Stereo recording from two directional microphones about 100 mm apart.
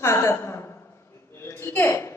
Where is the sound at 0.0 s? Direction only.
25° left (ahead or behind).